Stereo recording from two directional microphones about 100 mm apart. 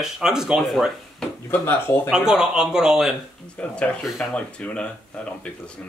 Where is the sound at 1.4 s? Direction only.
20° left (ahead or behind).